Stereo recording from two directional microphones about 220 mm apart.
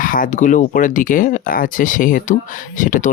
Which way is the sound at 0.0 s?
40° left (ahead or behind).